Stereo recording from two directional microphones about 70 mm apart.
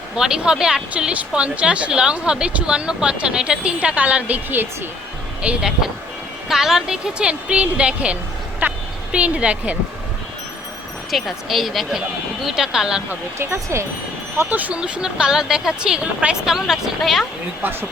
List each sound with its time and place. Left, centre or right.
0.2 s a woman's voice: centre; by 4.7 s right
5.4 s a woman's voice: centre
8.6 s speech: right
9.1 s a woman's voice: centre
11.1 s speech: centre
13.1 s speech: right
14.5 s a woman's voice: right; by 17.2 s centre
17.6 s speech: right